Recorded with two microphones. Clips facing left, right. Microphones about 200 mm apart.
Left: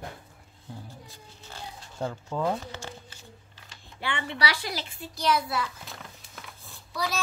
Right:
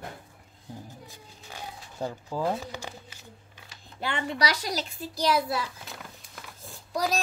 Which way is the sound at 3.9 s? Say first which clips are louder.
Right 2 dB; 40° right (ahead or behind).